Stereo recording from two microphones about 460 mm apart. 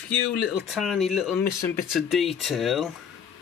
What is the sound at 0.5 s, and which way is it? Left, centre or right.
Speech, centre.